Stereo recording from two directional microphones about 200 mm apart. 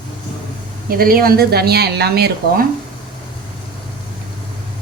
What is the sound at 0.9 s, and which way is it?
A woman's voice, 45° right (ahead or behind).